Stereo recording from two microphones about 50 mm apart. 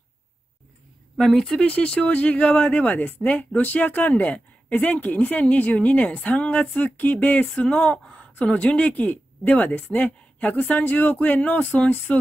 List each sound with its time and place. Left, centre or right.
1.1 s speech: centre
1.6 s speech: left
7.5 s speech: centre